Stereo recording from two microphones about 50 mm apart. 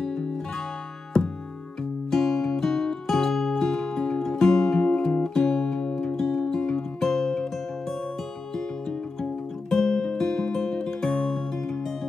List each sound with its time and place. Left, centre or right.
2.0 s music: centre
9.2 s music: centre